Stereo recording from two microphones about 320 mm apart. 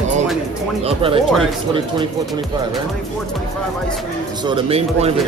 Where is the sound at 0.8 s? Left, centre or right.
Centre.